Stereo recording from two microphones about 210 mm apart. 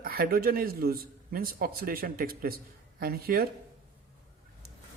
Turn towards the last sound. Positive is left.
turn(degrees=-45)  # may be behind; listen again after turning